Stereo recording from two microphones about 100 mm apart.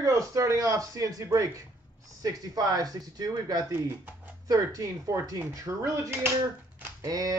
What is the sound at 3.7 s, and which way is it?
Speech, 20° right (ahead or behind).